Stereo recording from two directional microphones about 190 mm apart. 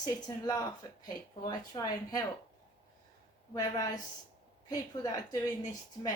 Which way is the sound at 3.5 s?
20° left (ahead or behind).